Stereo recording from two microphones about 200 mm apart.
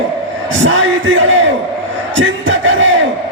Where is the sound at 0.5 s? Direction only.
70° right (ahead or behind).